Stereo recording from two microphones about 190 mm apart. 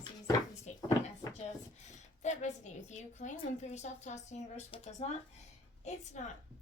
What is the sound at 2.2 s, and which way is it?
A woman's voice, 40° left (ahead or behind).